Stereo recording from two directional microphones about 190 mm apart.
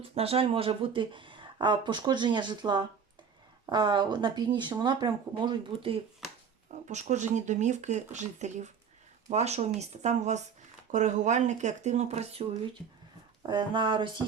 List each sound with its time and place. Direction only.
0.0 s speech: 30° right (ahead or behind)
6.7 s speech: 40° right (ahead or behind)